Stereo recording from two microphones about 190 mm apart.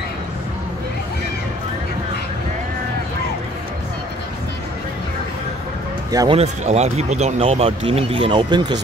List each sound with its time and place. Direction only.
6.1 s speech: 25° right (ahead or behind)
6.4 s speech: 35° right (ahead or behind)